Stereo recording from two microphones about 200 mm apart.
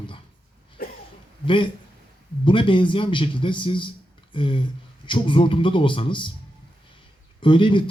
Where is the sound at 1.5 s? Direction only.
25° left (ahead or behind).